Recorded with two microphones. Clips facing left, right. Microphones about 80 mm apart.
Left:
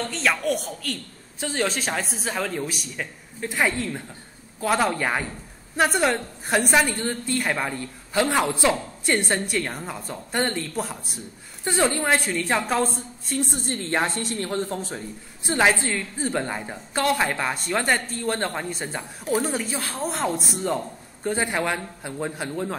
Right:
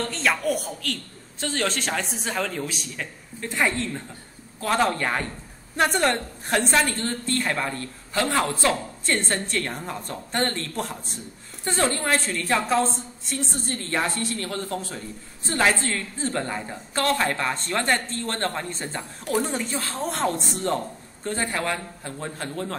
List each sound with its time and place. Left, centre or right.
0.0 s a man's voice: centre
9.7 s speech: centre
11.6 s a man's voice: centre
12.9 s a woman's voice: right
13.8 s a man's voice: left